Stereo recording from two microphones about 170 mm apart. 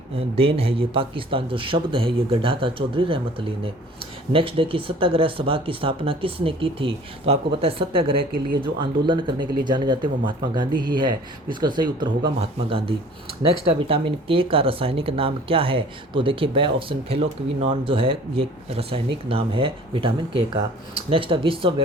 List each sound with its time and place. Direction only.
0.2 s speech: 35° right (ahead or behind)